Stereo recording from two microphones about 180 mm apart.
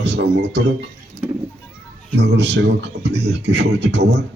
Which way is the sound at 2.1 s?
70° right (ahead or behind).